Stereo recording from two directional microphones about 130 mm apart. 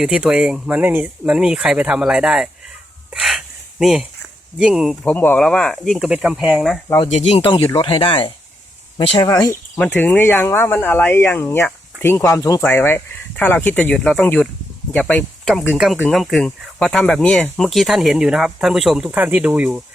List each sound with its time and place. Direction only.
0.0 s speech: 5° right (ahead or behind)
3.1 s a sound: 5° right (ahead or behind)
4.5 s speech: 5° right (ahead or behind)
5.0 s speech: 15° left (ahead or behind)
5.4 s speech: 5° left (ahead or behind)
7.1 s speech: 55° left (ahead or behind)
7.5 s speech: 25° left (ahead or behind)
7.8 s speech: 40° left (ahead or behind)
9.7 s speech: 15° left (ahead or behind); by 19.8 s 10° right (ahead or behind)